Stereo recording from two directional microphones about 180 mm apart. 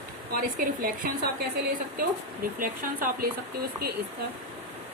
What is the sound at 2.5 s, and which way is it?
Speech, 50° right (ahead or behind).